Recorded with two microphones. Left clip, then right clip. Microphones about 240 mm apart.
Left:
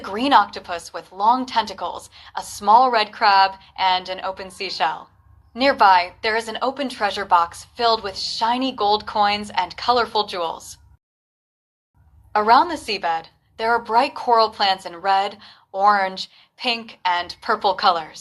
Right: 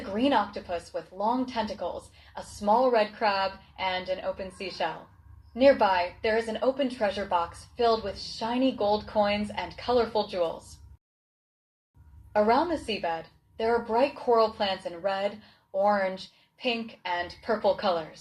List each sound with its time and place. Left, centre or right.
0.1 s a woman's voice: left
2.3 s a woman's voice: left
12.5 s a woman's voice: left